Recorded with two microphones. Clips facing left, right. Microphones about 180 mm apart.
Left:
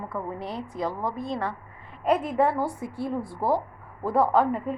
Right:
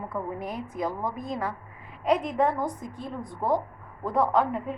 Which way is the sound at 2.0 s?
5° left (ahead or behind).